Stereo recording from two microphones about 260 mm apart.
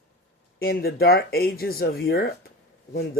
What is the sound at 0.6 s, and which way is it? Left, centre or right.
Speech, left.